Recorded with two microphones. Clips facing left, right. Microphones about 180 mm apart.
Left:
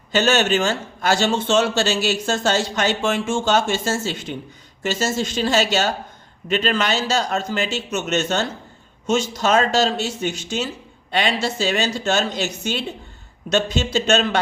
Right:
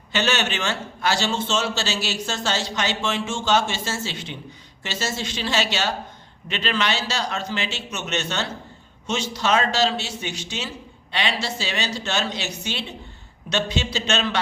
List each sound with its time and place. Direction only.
0.1 s a man's voice: 45° left (ahead or behind)